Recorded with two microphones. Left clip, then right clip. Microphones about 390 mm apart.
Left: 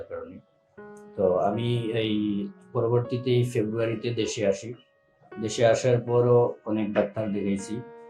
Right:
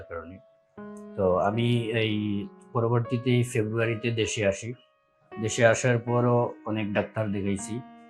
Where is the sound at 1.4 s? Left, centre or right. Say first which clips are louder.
Even; right.